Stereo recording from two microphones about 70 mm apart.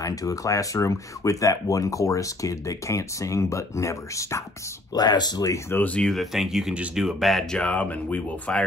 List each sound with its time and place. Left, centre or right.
0.0 s speech: left
4.9 s speech: left
5.7 s speech: left
5.9 s speech: centre
6.3 s speech: centre
7.5 s speech: centre